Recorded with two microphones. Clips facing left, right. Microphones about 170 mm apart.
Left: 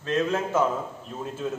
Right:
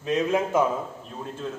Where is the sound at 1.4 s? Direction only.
5° left (ahead or behind).